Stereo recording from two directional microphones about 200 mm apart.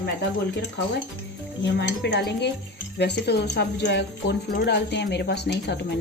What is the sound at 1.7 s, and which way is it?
Speech, 60° left (ahead or behind).